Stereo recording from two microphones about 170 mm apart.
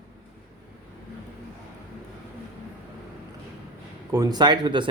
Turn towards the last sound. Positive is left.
turn(degrees=-25)  # may be behind; listen again after turning